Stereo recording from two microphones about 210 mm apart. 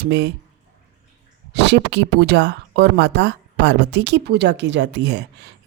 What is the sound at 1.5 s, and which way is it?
Speech, 55° right (ahead or behind).